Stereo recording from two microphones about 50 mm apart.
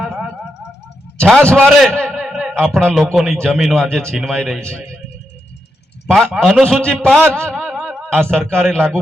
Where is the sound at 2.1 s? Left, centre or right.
Centre.